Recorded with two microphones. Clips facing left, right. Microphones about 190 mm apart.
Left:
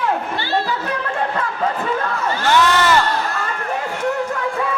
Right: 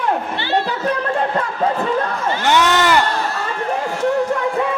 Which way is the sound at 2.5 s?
20° right (ahead or behind).